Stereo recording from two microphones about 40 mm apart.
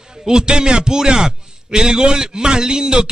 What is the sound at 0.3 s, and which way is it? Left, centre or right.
A man's voice, centre.